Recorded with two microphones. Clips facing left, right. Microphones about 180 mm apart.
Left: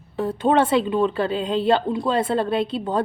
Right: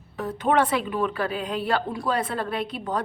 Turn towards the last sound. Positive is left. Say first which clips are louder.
# left 6 dB
turn(degrees=30)  # may be behind; listen again after turning